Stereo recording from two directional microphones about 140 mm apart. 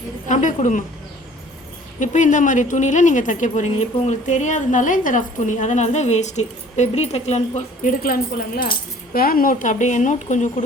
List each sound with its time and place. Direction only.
0.3 s a woman's voice: 60° left (ahead or behind)
2.0 s a woman's voice: 60° left (ahead or behind)
8.0 s a woman's voice: 90° left; by 10.5 s 60° left (ahead or behind)